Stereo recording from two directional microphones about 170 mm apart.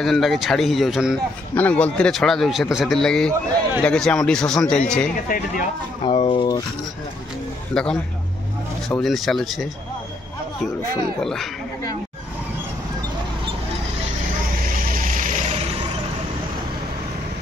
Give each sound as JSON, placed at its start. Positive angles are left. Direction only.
{"t": 0.0, "sound": "speech", "side_deg": 0}
{"t": 1.5, "sound": "speech", "side_deg": 10}
{"t": 6.0, "sound": "speech", "side_deg": 30}
{"t": 7.7, "sound": "speech", "side_deg": 5}
{"t": 15.0, "sound": "vehicle", "side_deg": -50}